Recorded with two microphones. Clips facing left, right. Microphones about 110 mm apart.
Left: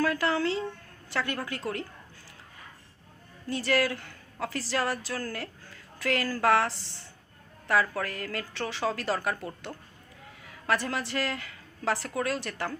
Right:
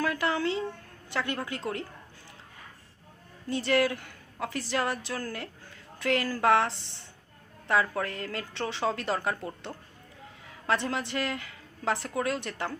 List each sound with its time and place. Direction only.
0.0 s speech: 20° right (ahead or behind)
3.5 s speech: 20° right (ahead or behind)
10.5 s a woman's voice: 20° right (ahead or behind)